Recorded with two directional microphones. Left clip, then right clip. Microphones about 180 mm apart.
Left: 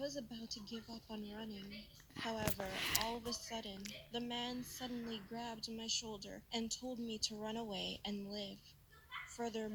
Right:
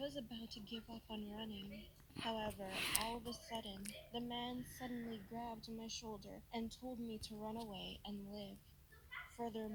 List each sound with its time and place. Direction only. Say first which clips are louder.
0.0 s speech: left 2 dB; 10° left (ahead or behind)
3.2 s speech: left 3 dB; 20° left (ahead or behind)
7.6 s a woman's voice: left 6 dB; 35° left (ahead or behind); by 9.6 s 20° left (ahead or behind)